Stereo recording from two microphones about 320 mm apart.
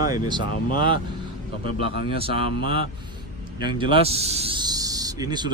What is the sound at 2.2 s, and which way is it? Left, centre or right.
Speech, centre.